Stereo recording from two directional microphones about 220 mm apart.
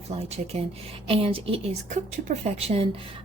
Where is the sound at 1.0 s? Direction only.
25° right (ahead or behind).